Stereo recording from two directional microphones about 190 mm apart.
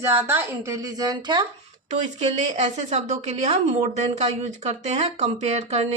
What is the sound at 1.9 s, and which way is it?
A woman's voice, 35° right (ahead or behind).